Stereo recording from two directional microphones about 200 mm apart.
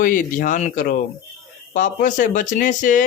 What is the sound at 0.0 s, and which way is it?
Speech, 40° left (ahead or behind).